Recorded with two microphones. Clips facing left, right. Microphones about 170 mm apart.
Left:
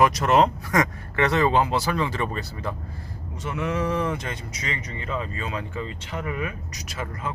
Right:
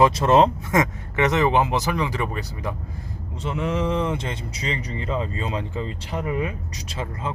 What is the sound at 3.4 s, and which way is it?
Speech, 25° right (ahead or behind).